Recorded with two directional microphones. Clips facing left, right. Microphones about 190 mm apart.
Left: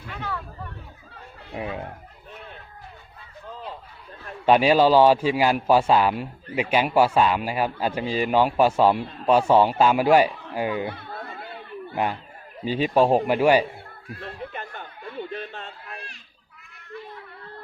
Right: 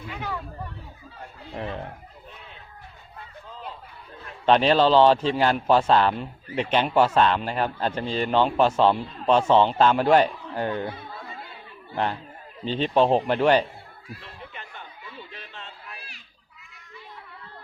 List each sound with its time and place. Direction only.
0.1 s chatter: 10° right (ahead or behind)
1.5 s a man's voice: 10° left (ahead or behind)
4.4 s a man's voice: 10° left (ahead or behind)
10.8 s music: 60° left (ahead or behind)
12.6 s a man's voice: 10° left (ahead or behind)
14.2 s a sound: 50° left (ahead or behind)